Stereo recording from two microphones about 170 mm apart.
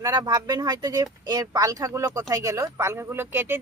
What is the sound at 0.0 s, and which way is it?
Speech, 25° right (ahead or behind).